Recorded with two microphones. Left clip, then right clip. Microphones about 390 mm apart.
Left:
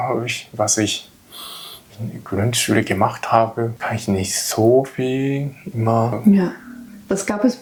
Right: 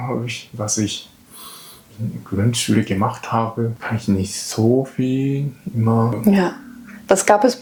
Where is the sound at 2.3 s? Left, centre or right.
Left.